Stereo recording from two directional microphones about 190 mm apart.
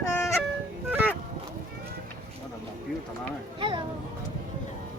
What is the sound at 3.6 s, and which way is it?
Music, 25° right (ahead or behind).